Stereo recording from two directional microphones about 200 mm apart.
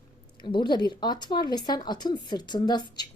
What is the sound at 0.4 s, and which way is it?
A woman's voice, 25° left (ahead or behind).